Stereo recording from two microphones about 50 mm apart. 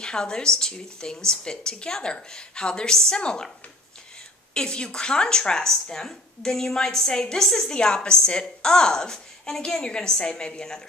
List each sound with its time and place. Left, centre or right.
0.0 s a woman's voice: centre
4.6 s a woman's voice: centre